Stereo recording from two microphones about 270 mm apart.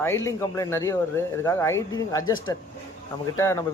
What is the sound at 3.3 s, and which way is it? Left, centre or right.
Speech, centre.